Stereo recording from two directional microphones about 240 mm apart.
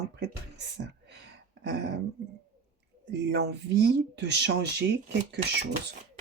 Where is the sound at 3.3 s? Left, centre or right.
Right.